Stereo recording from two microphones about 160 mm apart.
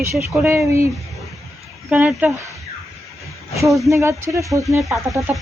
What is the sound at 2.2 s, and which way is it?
Speech, 20° right (ahead or behind).